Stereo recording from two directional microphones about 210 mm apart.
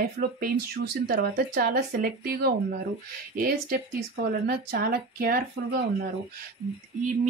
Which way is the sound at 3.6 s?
45° right (ahead or behind).